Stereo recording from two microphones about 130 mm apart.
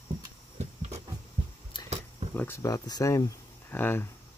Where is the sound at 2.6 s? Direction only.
30° left (ahead or behind).